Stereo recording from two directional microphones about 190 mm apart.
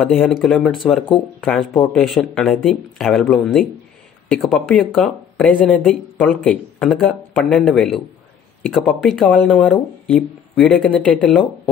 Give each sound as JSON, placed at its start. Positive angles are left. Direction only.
{"t": 0.0, "sound": "speech", "side_deg": 5}